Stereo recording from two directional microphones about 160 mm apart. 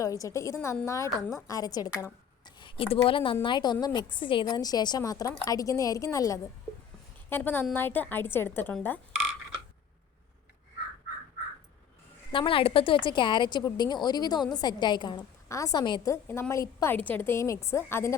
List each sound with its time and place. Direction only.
0.0 s a woman's voice: 20° left (ahead or behind)
12.3 s a woman's voice: 35° left (ahead or behind)
16.1 s a woman's voice: 15° left (ahead or behind)